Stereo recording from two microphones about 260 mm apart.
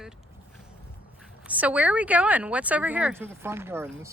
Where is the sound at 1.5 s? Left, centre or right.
Centre.